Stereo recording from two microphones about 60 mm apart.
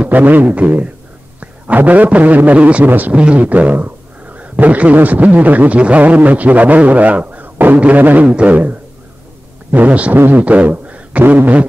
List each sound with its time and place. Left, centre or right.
0.0 s a man's voice: right
10.1 s speech: right
10.4 s a man's voice: right